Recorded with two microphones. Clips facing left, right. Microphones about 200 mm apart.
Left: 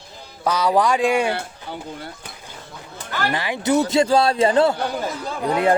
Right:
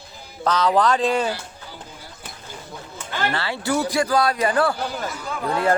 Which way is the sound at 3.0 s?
35° left (ahead or behind).